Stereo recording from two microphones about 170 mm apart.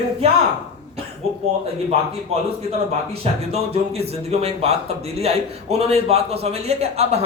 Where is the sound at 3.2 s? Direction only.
35° right (ahead or behind).